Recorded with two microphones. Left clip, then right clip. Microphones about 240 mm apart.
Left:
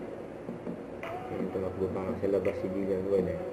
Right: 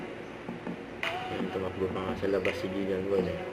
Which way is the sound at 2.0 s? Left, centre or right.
Centre.